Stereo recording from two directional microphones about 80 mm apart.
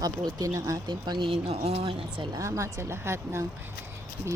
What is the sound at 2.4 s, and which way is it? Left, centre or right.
Speech, right.